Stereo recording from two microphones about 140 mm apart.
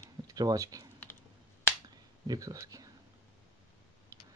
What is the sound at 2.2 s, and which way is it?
Speech, 25° right (ahead or behind).